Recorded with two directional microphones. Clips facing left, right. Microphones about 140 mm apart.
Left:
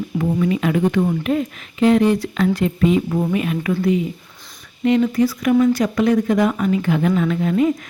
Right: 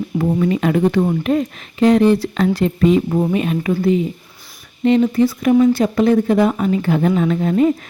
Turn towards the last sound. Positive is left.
turn(degrees=-35)  # may be behind; listen again after turning